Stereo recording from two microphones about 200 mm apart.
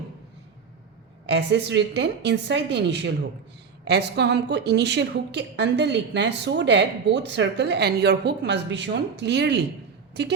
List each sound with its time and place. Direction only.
1.3 s a woman's voice: 60° right (ahead or behind)